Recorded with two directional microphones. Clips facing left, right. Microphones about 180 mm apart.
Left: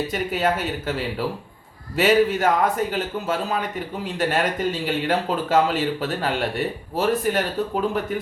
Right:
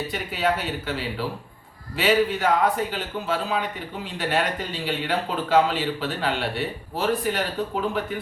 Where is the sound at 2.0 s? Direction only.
45° left (ahead or behind).